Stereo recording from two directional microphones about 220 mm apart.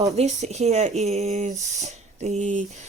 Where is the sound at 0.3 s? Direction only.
30° right (ahead or behind).